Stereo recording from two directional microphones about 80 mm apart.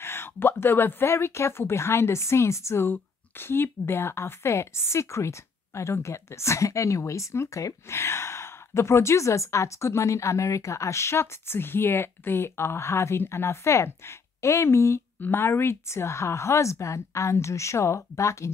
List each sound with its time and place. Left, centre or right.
0.0 s speech: left
15.1 s speech: left